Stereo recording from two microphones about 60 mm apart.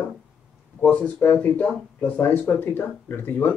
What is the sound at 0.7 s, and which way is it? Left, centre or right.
Speech, left.